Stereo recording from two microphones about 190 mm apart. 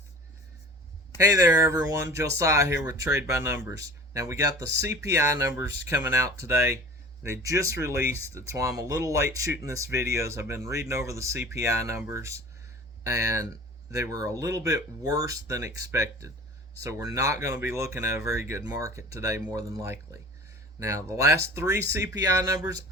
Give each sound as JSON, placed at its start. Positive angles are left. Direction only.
{"t": 1.2, "sound": "speech", "side_deg": -15}